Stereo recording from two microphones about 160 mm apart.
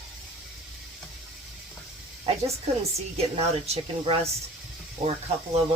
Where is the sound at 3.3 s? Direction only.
40° right (ahead or behind).